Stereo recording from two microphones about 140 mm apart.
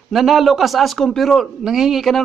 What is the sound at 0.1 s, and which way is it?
A man's voice, centre (ahead or behind).